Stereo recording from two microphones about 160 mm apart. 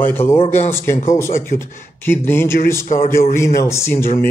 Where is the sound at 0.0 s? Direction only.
15° left (ahead or behind).